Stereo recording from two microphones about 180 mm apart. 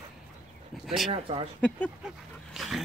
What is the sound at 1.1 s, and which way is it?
Speech, 30° right (ahead or behind).